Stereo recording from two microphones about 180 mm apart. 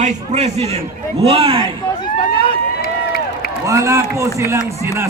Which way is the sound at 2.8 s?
55° left (ahead or behind).